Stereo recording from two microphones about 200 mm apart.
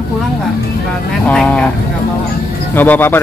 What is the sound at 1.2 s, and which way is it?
Speech, 5° left (ahead or behind).